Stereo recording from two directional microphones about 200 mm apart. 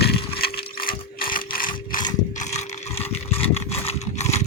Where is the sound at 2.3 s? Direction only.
35° left (ahead or behind).